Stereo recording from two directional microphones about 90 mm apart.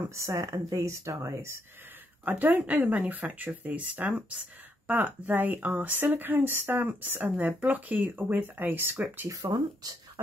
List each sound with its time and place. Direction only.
0.1 s speech: 35° right (ahead or behind)
2.2 s speech: 20° right (ahead or behind)
9.3 s speech: 45° right (ahead or behind)